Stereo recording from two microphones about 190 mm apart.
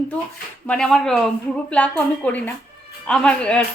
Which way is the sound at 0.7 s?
5° left (ahead or behind).